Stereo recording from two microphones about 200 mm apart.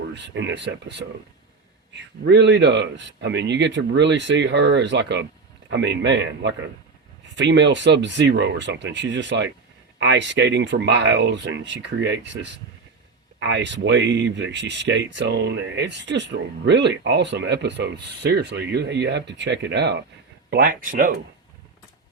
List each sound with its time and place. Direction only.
0.1 s speech: 60° right (ahead or behind)
2.2 s speech: 60° right (ahead or behind)
20.5 s speech: 45° right (ahead or behind)